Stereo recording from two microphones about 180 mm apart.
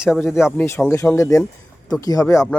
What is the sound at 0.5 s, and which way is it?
Speech, 10° left (ahead or behind).